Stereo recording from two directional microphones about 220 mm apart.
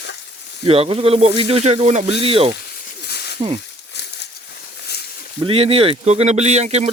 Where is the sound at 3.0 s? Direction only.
50° left (ahead or behind).